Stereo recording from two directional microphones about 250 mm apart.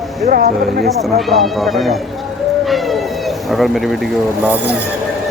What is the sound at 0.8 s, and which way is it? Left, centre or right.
Speech, centre.